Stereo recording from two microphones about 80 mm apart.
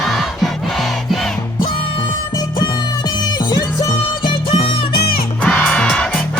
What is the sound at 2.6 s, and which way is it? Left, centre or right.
Music, left.